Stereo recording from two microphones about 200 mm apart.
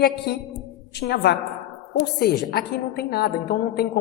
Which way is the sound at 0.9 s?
55° left (ahead or behind).